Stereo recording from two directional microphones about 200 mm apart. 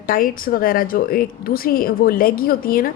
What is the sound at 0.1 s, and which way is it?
A woman's voice, 45° left (ahead or behind).